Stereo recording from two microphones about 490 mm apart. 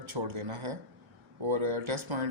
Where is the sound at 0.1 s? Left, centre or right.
Right.